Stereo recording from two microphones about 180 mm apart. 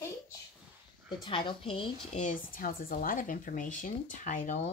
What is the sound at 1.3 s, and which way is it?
A woman's voice, 30° left (ahead or behind).